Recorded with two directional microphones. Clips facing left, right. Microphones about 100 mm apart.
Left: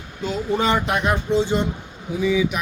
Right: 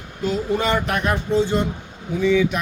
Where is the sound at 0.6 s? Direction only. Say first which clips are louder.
Left 1 dB; 20° left (ahead or behind).